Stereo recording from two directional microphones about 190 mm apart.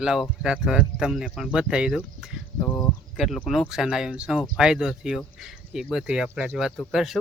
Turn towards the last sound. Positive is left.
turn(degrees=0)  # may be behind; listen again after turning